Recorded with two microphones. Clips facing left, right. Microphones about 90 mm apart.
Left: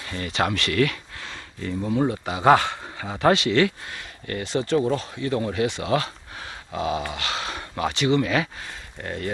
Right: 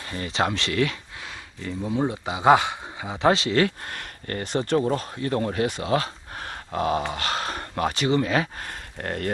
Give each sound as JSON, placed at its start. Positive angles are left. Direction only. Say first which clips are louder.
{"t": 0.0, "sound": "speech", "louder": "even", "side_deg": -30}
{"t": 1.2, "sound": "a sound", "louder": "left 4 dB", "side_deg": -5}
{"t": 2.0, "sound": "speech", "louder": "even", "side_deg": -15}
{"t": 3.3, "sound": "speech", "louder": "left 2 dB", "side_deg": -35}
{"t": 3.9, "sound": "speech", "louder": "even", "side_deg": -50}
{"t": 7.0, "sound": "speech", "louder": "right 2 dB", "side_deg": -30}
{"t": 7.2, "sound": "speech", "louder": "right 2 dB", "side_deg": -45}
{"t": 8.5, "sound": "speech", "louder": "right 2 dB", "side_deg": -55}